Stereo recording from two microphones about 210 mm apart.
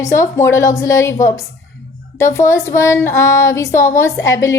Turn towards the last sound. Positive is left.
turn(degrees=15)  # may be behind; listen again after turning